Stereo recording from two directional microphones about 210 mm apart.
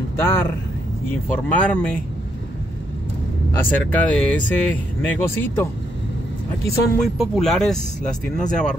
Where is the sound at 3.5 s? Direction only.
5° left (ahead or behind).